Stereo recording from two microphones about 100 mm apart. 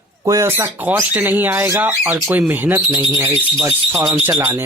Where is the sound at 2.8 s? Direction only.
30° right (ahead or behind).